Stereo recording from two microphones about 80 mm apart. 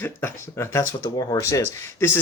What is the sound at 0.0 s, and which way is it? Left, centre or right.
Speech, left.